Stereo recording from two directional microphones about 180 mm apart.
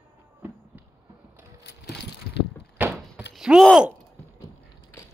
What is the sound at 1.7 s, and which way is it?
Vehicle, 70° left (ahead or behind).